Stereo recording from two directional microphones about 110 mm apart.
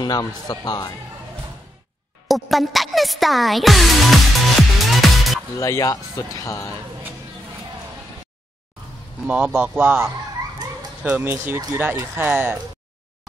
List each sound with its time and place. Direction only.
0.0 s a man's voice: 40° left (ahead or behind)
2.2 s speech: centre (ahead or behind)
5.6 s speech: 30° left (ahead or behind)
9.2 s speech: 10° right (ahead or behind)
11.1 s speech: 15° right (ahead or behind)